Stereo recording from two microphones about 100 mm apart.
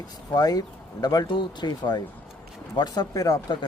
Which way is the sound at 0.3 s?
40° left (ahead or behind).